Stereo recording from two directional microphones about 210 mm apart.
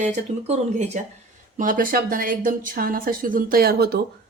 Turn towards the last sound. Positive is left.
turn(degrees=-50)  # may be behind; listen again after turning